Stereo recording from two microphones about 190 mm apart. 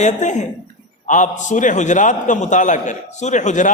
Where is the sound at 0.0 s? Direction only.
40° left (ahead or behind).